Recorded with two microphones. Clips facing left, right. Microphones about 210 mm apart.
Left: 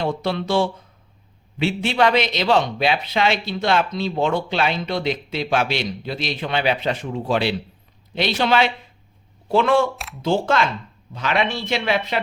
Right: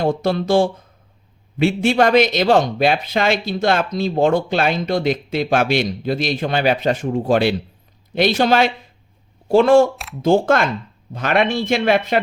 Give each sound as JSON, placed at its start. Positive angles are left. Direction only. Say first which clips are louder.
{"t": 0.0, "sound": "speech", "louder": "right 5 dB", "side_deg": -45}
{"t": 9.9, "sound": "speech", "louder": "right 1 dB", "side_deg": 0}
{"t": 10.2, "sound": "speech", "louder": "right 5 dB", "side_deg": -50}